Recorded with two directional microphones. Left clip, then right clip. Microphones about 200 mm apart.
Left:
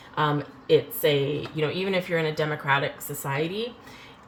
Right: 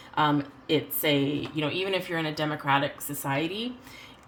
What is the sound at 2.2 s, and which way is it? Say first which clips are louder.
Speech: left 3 dB; 45° right (ahead or behind).